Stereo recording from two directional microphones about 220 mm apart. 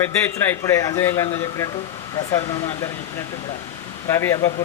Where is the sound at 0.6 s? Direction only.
15° left (ahead or behind).